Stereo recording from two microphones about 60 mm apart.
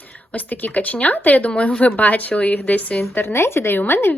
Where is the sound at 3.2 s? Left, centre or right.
Left.